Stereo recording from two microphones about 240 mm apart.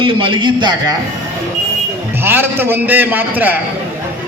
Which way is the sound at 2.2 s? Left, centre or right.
Centre.